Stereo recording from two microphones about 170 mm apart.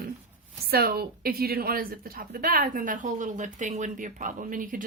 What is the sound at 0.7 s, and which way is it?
A woman's voice, 65° right (ahead or behind).